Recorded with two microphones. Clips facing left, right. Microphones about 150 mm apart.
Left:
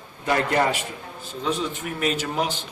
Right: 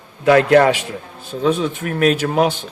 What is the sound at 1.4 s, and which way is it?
A man's voice, 60° right (ahead or behind).